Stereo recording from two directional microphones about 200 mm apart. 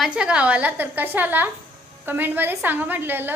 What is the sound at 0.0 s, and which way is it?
A woman's voice, 5° right (ahead or behind).